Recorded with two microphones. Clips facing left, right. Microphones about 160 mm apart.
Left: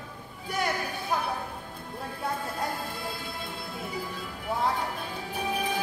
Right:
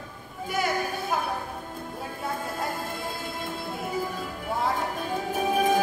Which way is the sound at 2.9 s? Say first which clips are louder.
Right 3 dB; 45° right (ahead or behind).